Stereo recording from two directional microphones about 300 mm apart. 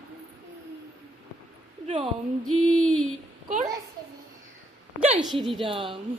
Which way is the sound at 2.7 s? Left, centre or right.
Centre.